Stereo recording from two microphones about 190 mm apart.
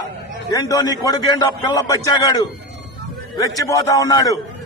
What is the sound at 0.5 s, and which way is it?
A man's voice, 20° left (ahead or behind).